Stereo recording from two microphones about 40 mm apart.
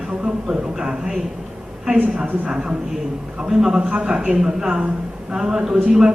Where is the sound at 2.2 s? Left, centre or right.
Centre.